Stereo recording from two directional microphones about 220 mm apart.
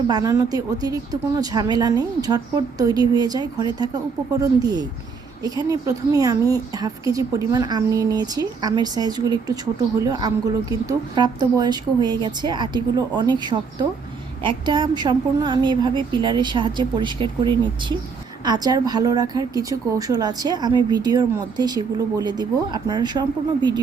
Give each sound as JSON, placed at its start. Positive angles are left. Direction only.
{"t": 0.1, "sound": "a woman's voice", "side_deg": -15}